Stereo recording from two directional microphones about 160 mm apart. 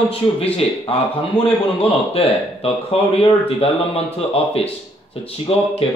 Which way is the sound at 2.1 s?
40° left (ahead or behind).